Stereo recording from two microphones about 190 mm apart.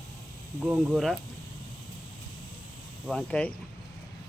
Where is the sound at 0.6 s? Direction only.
5° right (ahead or behind).